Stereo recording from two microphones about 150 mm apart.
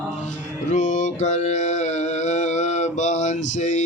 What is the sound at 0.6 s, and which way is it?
Mantra, 55° left (ahead or behind).